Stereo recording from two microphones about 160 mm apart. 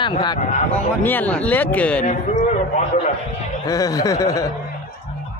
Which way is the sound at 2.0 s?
45° left (ahead or behind).